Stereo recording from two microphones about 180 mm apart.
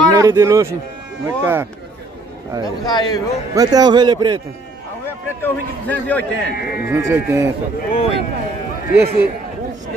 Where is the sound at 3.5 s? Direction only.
20° right (ahead or behind).